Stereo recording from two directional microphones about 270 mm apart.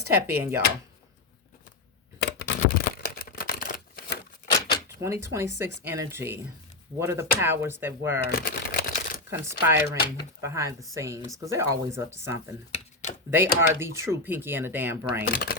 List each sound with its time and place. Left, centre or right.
0.1 s speech: centre
2.1 s camera: left
4.9 s speech: centre
8.2 s shuffling cards: left
9.3 s speech: centre
12.7 s a sound: left
13.3 s speech: centre
15.3 s speech: left